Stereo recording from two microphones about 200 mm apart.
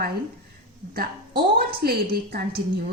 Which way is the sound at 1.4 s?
50° right (ahead or behind).